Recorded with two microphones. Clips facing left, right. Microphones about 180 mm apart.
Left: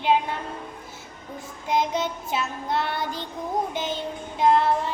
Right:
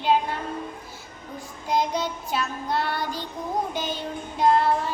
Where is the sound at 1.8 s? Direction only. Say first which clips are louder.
Left 1 dB; 20° left (ahead or behind).